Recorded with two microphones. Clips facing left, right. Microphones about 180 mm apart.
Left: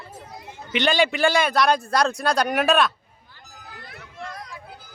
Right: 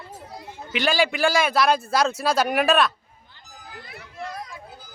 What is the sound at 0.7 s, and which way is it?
A man's voice, centre (ahead or behind).